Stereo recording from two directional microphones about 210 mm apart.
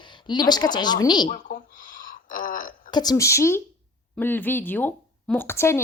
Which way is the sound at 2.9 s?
20° left (ahead or behind).